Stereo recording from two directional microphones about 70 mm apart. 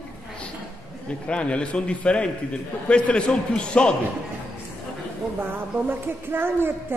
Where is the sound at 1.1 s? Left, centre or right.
Centre.